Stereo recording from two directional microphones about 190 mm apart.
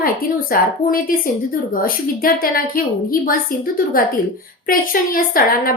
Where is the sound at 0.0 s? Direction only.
50° left (ahead or behind).